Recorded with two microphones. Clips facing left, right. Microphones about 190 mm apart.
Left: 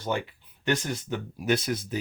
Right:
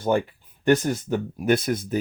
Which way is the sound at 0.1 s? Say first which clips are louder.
Right 8 dB; 45° right (ahead or behind).